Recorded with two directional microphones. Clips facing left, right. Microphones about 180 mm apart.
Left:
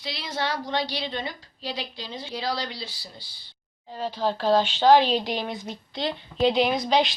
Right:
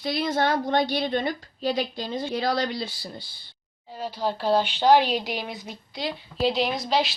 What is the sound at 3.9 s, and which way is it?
A woman's voice, 10° right (ahead or behind).